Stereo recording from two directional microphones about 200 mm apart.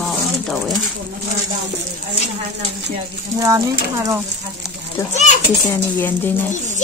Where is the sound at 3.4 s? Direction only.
15° right (ahead or behind).